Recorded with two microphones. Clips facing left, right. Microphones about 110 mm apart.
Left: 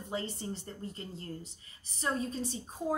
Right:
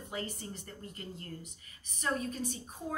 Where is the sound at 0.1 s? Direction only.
25° left (ahead or behind).